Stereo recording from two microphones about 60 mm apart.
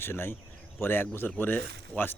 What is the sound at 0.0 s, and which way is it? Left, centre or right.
Speech, left.